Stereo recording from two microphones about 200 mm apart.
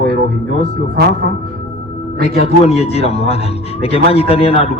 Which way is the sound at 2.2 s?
30° left (ahead or behind).